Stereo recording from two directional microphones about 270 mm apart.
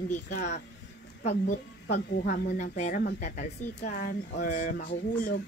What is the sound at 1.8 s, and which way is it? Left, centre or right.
Speech, left.